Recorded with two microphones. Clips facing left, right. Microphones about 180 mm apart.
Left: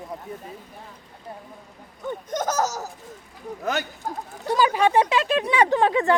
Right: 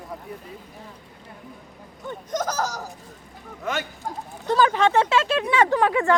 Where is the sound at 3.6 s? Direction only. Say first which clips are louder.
Left 1 dB; 35° left (ahead or behind).